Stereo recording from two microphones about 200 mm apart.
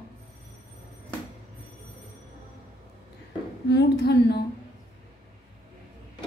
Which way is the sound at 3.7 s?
55° left (ahead or behind).